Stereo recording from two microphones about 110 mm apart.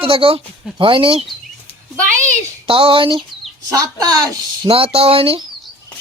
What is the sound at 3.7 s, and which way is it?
Speech, 35° right (ahead or behind).